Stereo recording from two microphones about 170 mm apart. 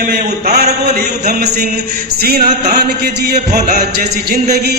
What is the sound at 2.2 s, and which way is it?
Speech, 65° right (ahead or behind).